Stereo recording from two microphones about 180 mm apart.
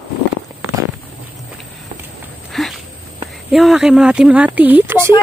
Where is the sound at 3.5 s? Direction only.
Centre (ahead or behind).